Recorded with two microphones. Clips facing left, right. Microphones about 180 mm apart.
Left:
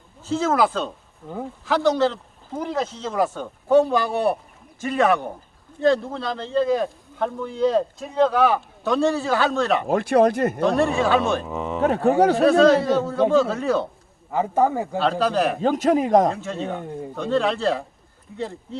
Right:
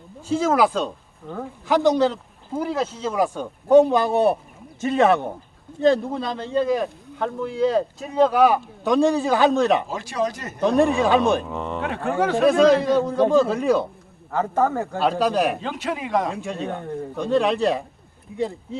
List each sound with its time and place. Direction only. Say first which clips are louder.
0.2 s speech: right 1 dB; 10° right (ahead or behind)
1.2 s a man's voice: even; 5° left (ahead or behind)
1.6 s speech: right 2 dB; 15° right (ahead or behind)
9.8 s speech: left 8 dB; 60° left (ahead or behind)
10.6 s speech: right 4 dB; 15° right (ahead or behind)
11.4 s speech: left 1 dB; 5° left (ahead or behind)
11.8 s a man's voice: left 7 dB; 40° left (ahead or behind)
12.5 s speech: right 3 dB; 15° right (ahead or behind)
14.3 s a man's voice: left 1 dB; 10° left (ahead or behind)
15.0 s speech: right 1 dB; 10° right (ahead or behind)
15.6 s a man's voice: left 9 dB; 40° left (ahead or behind)
16.4 s speech: even; 15° right (ahead or behind)
16.7 s a man's voice: right 1 dB; 10° left (ahead or behind)
17.2 s speech: right 2 dB; 15° right (ahead or behind)